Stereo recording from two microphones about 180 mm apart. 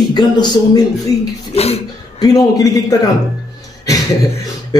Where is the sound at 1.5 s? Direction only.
35° left (ahead or behind).